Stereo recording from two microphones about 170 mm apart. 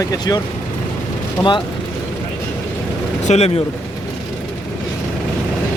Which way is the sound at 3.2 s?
40° left (ahead or behind).